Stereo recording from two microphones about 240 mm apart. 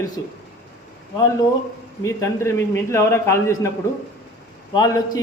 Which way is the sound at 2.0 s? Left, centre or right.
Centre.